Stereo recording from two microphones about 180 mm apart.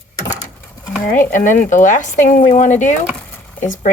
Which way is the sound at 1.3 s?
45° left (ahead or behind).